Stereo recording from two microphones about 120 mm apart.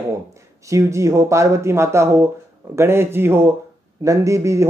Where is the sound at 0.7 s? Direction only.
25° right (ahead or behind).